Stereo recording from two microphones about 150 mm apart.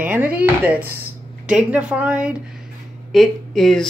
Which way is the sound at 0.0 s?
10° right (ahead or behind).